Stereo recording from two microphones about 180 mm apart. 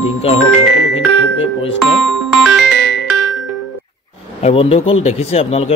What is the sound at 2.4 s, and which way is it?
Music, centre (ahead or behind).